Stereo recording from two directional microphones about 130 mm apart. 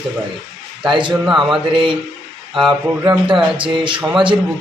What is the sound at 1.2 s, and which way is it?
Speech, 5° right (ahead or behind).